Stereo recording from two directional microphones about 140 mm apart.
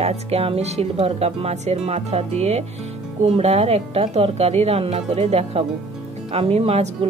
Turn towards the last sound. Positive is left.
turn(degrees=-45)  # may be behind; listen again after turning